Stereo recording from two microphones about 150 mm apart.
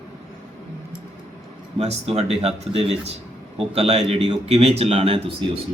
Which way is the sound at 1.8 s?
45° right (ahead or behind).